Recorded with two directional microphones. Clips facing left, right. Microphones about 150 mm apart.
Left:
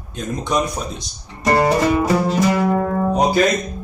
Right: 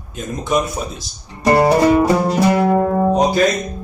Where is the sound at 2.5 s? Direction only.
30° right (ahead or behind).